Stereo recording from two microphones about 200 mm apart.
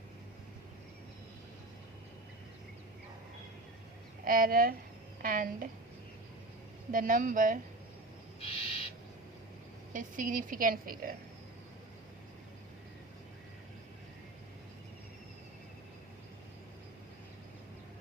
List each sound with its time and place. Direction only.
4.3 s a woman's voice: 45° right (ahead or behind)
6.9 s a woman's voice: 45° right (ahead or behind)
8.4 s owl: 30° left (ahead or behind)
9.9 s a woman's voice: 40° right (ahead or behind)